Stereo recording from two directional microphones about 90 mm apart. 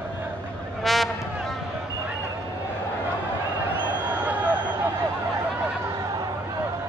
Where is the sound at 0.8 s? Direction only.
Centre (ahead or behind).